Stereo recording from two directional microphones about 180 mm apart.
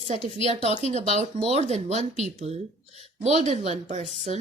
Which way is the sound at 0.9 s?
40° right (ahead or behind).